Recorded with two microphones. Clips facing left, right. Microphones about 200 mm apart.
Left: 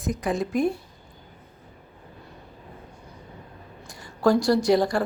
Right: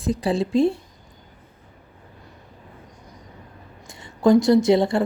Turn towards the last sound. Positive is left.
turn(degrees=-25)  # may be behind; listen again after turning